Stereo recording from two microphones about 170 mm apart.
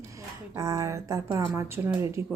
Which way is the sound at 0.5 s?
20° right (ahead or behind).